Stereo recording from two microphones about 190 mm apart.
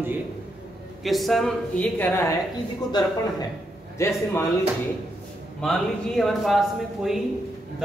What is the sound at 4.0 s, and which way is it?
Speech, 15° left (ahead or behind).